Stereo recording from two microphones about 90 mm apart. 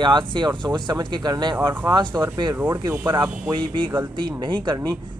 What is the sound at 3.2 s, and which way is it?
Speech, 65° right (ahead or behind).